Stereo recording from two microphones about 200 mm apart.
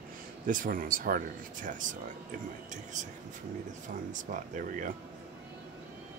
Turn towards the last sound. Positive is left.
turn(degrees=-40)  # may be behind; listen again after turning